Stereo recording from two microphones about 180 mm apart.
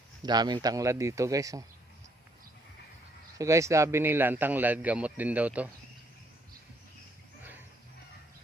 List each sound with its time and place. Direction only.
0.2 s a man's voice: 25° right (ahead or behind)
3.3 s a man's voice: 15° right (ahead or behind)